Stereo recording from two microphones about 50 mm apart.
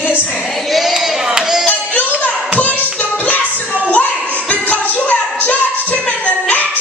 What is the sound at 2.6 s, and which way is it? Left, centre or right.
Hands, left.